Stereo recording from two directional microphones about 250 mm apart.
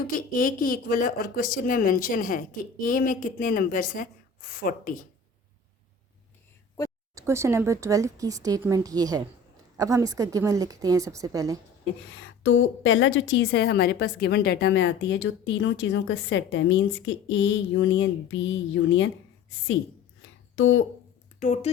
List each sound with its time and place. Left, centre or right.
0.0 s speech: left
7.2 s speech: centre
12.4 s a woman's voice: left
21.3 s speech: left